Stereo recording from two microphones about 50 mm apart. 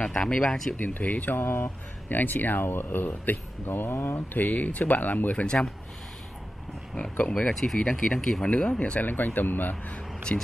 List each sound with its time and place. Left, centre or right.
0.5 s speech: centre
0.7 s speech: left
1.4 s speech: left
2.0 s speech: left
4.3 s speech: left
7.0 s speech: left
8.5 s speech: left
9.0 s speech: left
10.3 s speech: centre